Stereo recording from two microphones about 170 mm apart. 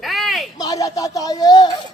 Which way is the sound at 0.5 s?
20° left (ahead or behind).